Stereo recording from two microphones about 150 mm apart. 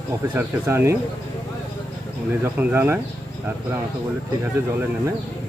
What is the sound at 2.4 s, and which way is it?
Speech, 15° right (ahead or behind).